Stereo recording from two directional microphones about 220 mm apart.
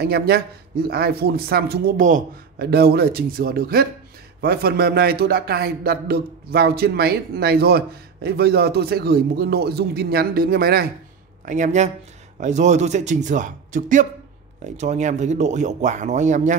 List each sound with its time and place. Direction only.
0.0 s a man's voice: 45° right (ahead or behind)